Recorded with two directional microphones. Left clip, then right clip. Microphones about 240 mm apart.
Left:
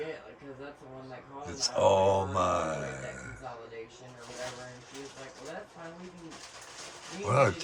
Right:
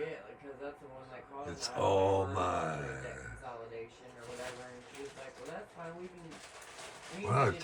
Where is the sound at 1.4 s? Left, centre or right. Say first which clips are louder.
Left 7 dB; centre.